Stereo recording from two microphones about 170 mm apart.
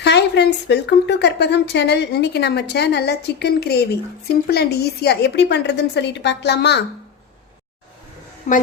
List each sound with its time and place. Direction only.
0.0 s speech: 80° left
8.5 s a woman's voice: 45° left (ahead or behind)